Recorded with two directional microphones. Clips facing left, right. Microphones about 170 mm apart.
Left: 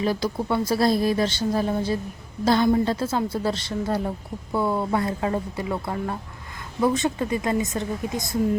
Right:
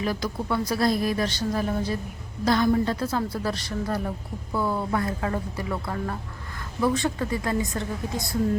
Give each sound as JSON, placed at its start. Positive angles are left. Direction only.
{"t": 0.0, "sound": "a woman's voice", "side_deg": 30}